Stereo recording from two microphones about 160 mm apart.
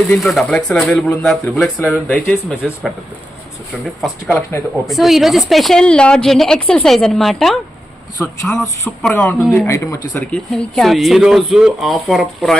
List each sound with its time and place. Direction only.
0.1 s speech: centre (ahead or behind)
4.0 s speech: centre (ahead or behind)
9.2 s speech: 15° left (ahead or behind)
10.3 s speech: 5° left (ahead or behind)